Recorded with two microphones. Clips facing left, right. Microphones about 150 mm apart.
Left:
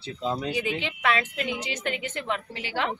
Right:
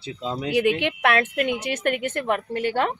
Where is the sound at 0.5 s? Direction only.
65° right (ahead or behind).